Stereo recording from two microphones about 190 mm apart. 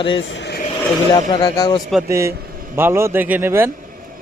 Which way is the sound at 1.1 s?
20° left (ahead or behind).